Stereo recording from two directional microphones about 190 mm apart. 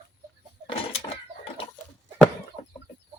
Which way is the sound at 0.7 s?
30° left (ahead or behind).